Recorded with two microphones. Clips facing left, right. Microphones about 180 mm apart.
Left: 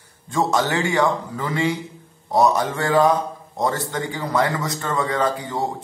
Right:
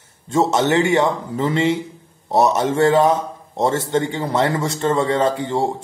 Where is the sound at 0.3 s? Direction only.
25° right (ahead or behind).